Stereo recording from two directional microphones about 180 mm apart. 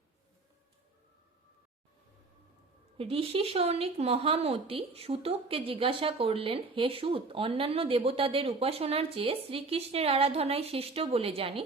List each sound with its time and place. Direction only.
3.0 s a woman's voice: 30° right (ahead or behind)